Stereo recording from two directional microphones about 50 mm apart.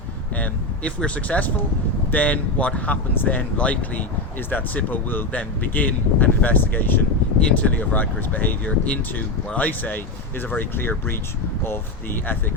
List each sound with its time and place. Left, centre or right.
0.3 s speech: left